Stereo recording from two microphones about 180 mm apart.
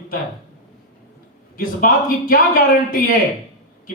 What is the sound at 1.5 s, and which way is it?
A man's voice, 55° left (ahead or behind).